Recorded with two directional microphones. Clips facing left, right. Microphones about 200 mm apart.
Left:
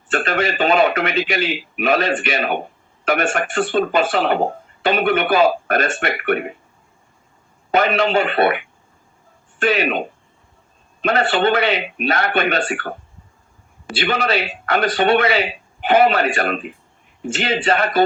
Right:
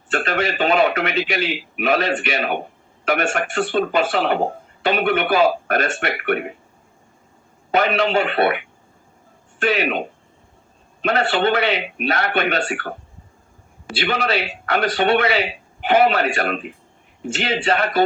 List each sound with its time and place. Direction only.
0.1 s speech: 50° left (ahead or behind)
7.7 s speech: 45° left (ahead or behind)
9.6 s speech: 45° left (ahead or behind)
11.0 s speech: 45° left (ahead or behind)